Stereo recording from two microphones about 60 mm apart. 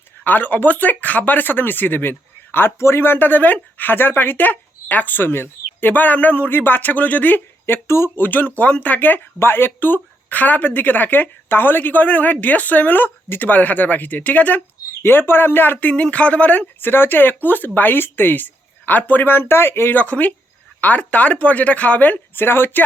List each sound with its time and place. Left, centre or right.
0.3 s speech: left
7.9 s speech: left
8.2 s speech: left
15.0 s speech: left
16.8 s speech: left
20.0 s speech: left